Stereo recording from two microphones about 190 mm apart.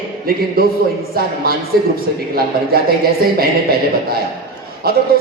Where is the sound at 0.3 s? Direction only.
55° right (ahead or behind).